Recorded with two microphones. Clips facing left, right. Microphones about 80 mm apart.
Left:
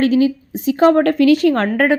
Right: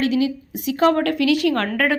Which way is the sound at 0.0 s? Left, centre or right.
Left.